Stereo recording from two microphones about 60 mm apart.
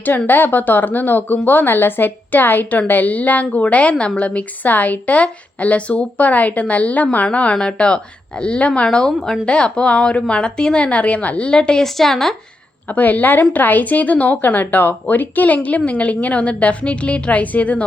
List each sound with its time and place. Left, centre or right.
0.3 s a woman's voice: left; by 12.4 s centre
12.9 s a woman's voice: left